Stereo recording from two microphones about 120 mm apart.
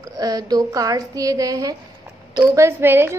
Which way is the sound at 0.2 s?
30° right (ahead or behind).